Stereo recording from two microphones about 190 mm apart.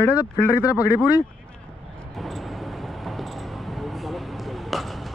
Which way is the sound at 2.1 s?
Centre (ahead or behind).